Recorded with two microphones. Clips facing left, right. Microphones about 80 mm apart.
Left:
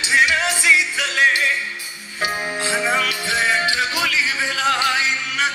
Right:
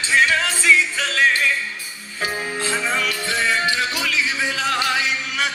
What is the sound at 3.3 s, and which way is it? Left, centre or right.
Music, centre.